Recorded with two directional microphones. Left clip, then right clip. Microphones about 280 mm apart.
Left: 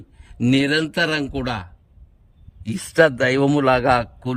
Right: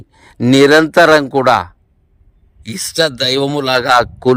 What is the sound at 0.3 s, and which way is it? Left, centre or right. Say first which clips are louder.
A man's voice: right 11 dB; centre.